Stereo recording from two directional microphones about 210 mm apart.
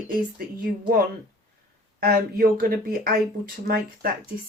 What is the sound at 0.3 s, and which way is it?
Speech, 45° right (ahead or behind).